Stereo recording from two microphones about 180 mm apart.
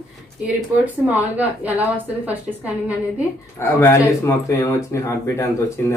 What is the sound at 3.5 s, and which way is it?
Speech, 15° left (ahead or behind).